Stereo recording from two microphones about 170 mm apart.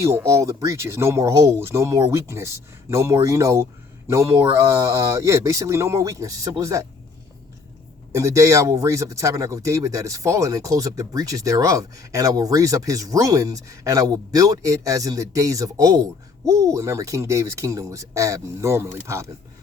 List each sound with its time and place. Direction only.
0.0 s speech: 15° right (ahead or behind)
8.1 s speech: 20° right (ahead or behind)